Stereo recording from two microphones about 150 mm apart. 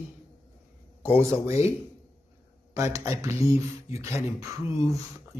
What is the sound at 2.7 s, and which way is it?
Mantra, 20° right (ahead or behind).